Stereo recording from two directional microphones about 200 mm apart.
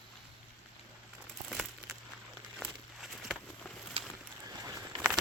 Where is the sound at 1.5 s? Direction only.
Centre (ahead or behind).